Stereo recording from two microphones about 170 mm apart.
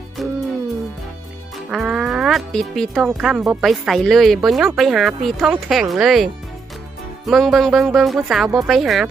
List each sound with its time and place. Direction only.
0.2 s music: centre (ahead or behind)
1.5 s speech: centre (ahead or behind)